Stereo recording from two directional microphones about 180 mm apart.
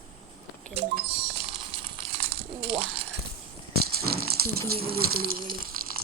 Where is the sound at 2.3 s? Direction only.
30° right (ahead or behind).